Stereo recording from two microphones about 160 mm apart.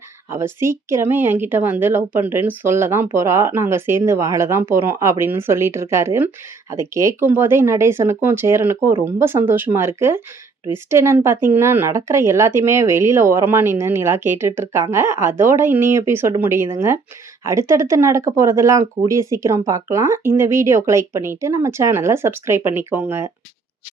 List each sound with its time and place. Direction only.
0.3 s speech: 15° right (ahead or behind)